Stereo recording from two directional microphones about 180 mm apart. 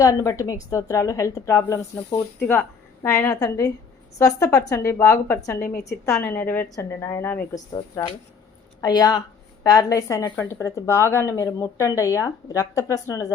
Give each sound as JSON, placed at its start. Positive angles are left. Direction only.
{"t": 0.0, "sound": "a woman's voice", "side_deg": 20}